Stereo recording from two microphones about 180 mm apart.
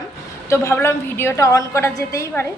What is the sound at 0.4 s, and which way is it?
A woman's voice, 15° left (ahead or behind).